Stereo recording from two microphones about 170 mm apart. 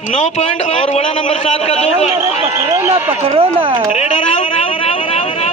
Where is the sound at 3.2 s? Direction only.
30° right (ahead or behind).